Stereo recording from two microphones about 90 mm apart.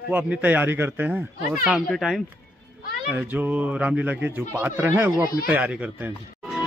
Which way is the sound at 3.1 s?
20° right (ahead or behind).